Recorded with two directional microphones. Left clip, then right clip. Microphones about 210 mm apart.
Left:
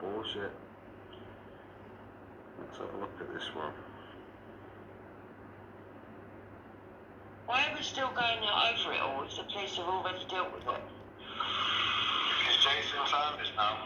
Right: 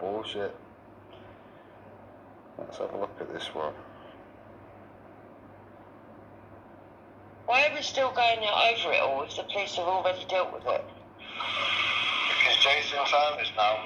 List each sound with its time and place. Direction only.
2.6 s speech: 30° right (ahead or behind)
7.4 s a woman's voice: 30° right (ahead or behind)